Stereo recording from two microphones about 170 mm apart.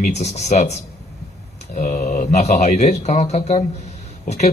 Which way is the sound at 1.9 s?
45° left (ahead or behind).